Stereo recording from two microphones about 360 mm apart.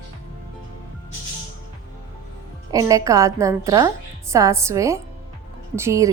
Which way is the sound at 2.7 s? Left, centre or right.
Centre.